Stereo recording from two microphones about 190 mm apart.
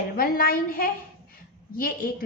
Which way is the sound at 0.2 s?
50° left (ahead or behind).